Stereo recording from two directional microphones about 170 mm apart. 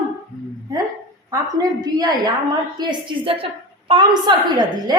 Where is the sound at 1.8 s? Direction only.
25° right (ahead or behind).